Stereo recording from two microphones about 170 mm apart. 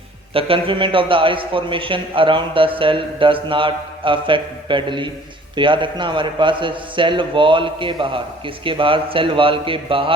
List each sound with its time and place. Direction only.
0.3 s a man's voice: 30° right (ahead or behind)